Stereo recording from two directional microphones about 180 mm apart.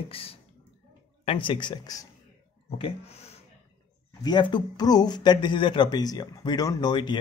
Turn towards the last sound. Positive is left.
turn(degrees=25)  # may be behind; listen again after turning